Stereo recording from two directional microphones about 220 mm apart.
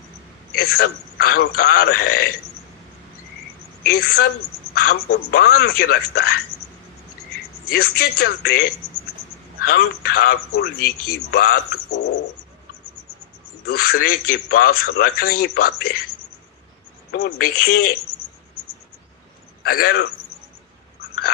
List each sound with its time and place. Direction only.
0.5 s a man's voice: 45° left (ahead or behind)
3.8 s a man's voice: 45° left (ahead or behind)
7.7 s a man's voice: 45° left (ahead or behind)
13.7 s a man's voice: 45° left (ahead or behind)
17.1 s a man's voice: 50° left (ahead or behind)
19.6 s a man's voice: 45° left (ahead or behind)